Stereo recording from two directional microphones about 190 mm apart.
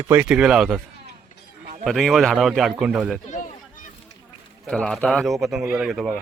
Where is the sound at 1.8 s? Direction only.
Centre (ahead or behind).